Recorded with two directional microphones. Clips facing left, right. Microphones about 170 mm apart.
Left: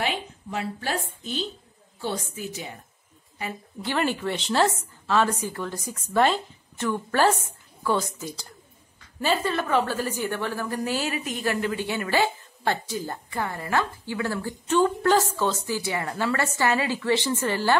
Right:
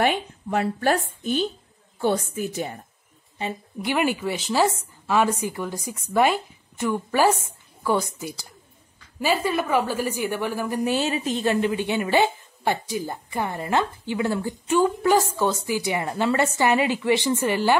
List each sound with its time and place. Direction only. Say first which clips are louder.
0.0 s a woman's voice: right 6 dB; 55° right (ahead or behind)
3.3 s a woman's voice: right 4 dB; 20° right (ahead or behind)